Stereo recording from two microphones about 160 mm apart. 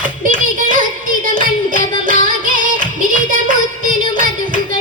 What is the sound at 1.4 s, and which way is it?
Music, 60° right (ahead or behind).